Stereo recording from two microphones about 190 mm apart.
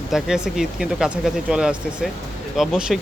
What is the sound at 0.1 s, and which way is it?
Speech, 5° right (ahead or behind).